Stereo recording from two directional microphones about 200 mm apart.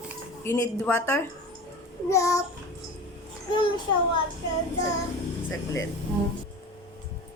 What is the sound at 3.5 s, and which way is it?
Speech, 25° left (ahead or behind).